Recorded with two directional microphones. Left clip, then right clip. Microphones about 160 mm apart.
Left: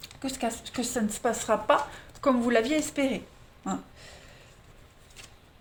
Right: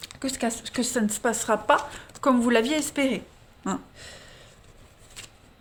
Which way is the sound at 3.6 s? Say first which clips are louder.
Right 3 dB; 55° right (ahead or behind).